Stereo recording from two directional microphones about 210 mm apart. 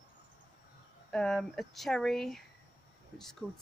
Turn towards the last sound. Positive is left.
turn(degrees=10)  # may be behind; listen again after turning